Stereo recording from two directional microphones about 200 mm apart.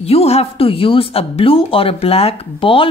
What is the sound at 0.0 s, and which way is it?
Speech, 30° left (ahead or behind).